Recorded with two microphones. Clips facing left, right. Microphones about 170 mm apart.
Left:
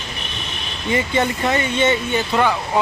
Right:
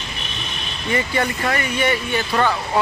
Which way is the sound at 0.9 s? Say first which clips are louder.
Left 2 dB; 20° left (ahead or behind).